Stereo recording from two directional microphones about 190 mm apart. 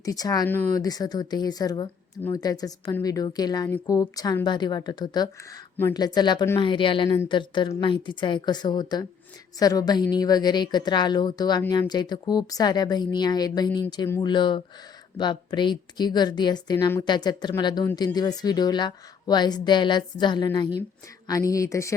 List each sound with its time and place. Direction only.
0.0 s a woman's voice: 20° left (ahead or behind)
16.7 s speech: 10° left (ahead or behind)
17.1 s a woman's voice: 20° left (ahead or behind)